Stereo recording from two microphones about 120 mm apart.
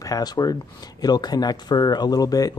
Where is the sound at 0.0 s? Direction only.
30° left (ahead or behind).